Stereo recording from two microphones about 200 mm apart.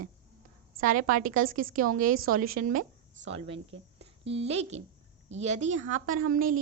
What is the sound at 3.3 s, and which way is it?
A woman's voice, 30° right (ahead or behind).